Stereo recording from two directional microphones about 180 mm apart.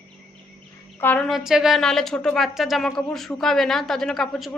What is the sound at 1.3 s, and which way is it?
Speech, centre (ahead or behind).